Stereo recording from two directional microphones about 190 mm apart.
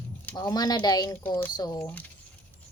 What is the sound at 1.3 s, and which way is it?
Speech, 10° left (ahead or behind).